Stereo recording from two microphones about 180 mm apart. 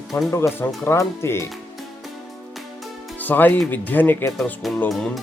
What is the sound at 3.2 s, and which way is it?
A man's voice, 10° left (ahead or behind).